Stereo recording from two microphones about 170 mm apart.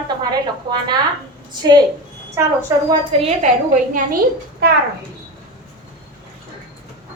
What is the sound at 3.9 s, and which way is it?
Speech, 55° right (ahead or behind).